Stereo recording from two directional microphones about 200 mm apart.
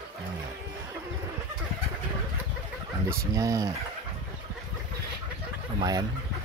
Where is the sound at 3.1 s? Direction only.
15° right (ahead or behind).